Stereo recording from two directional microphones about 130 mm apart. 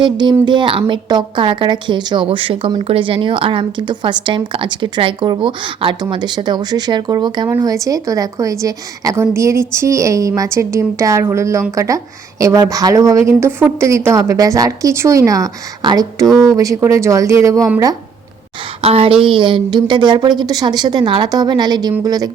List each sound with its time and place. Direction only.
0.0 s speech: 35° right (ahead or behind)
16.2 s speech: centre (ahead or behind)
16.5 s speech: 25° right (ahead or behind)
18.8 s speech: 50° right (ahead or behind); by 22.3 s 30° right (ahead or behind)